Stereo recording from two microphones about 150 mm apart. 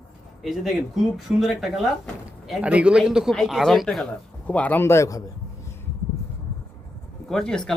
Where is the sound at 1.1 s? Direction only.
Centre (ahead or behind); by 5.2 s 20° left (ahead or behind).